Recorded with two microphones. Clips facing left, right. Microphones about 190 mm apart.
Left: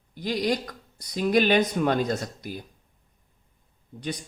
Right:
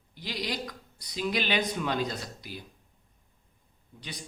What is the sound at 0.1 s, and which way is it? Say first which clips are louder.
Speech: left 9 dB; 45° left (ahead or behind).